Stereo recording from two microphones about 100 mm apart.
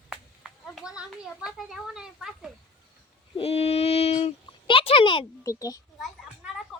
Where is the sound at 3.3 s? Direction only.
90° left.